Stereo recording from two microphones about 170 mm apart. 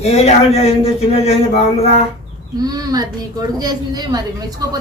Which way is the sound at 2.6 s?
25° right (ahead or behind).